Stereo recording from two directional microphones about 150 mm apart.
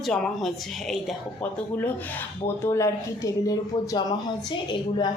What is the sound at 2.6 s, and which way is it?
Speech, 20° left (ahead or behind).